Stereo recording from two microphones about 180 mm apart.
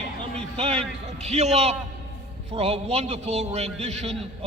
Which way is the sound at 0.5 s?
30° right (ahead or behind).